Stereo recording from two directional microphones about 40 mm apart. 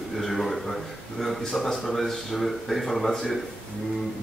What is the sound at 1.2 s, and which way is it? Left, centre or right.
A woman's voice, centre.